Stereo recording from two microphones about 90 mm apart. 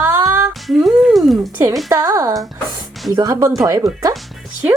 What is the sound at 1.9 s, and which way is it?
Speech, 35° right (ahead or behind).